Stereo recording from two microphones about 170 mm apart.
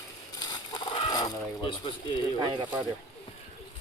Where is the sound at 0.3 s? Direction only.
25° left (ahead or behind).